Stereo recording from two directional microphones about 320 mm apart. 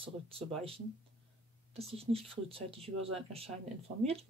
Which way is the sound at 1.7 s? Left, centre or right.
Centre.